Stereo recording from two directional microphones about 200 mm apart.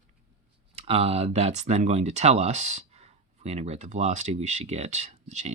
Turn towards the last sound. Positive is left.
turn(degrees=-35)  # may be behind; listen again after turning